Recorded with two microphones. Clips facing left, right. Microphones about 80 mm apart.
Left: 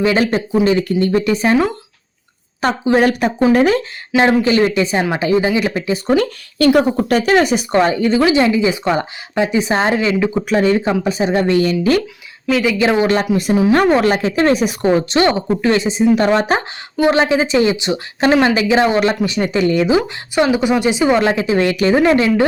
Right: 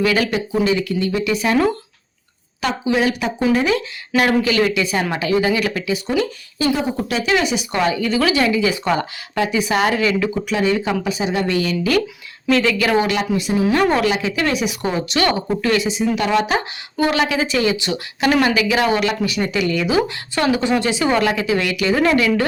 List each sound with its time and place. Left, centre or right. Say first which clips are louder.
0.0 s speech: left 3 dB; left
2.6 s a woman's voice: left 5 dB; left
4.1 s speech: left 4 dB; left
6.1 s speech: left 5 dB; left
6.9 s speech: left 6 dB; left
10.3 s speech: left 4 dB; left
12.6 s speech: left 3 dB; left
13.1 s speech: left 5 dB; left
20.3 s speech: left 4 dB; centre